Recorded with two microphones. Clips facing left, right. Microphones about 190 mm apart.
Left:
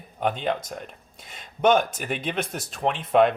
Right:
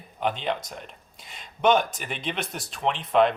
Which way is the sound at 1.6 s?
45° left (ahead or behind).